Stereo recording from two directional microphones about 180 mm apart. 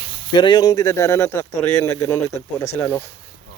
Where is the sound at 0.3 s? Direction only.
25° left (ahead or behind).